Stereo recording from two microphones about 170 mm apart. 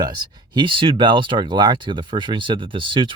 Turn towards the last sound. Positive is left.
turn(degrees=-30)  # may be behind; listen again after turning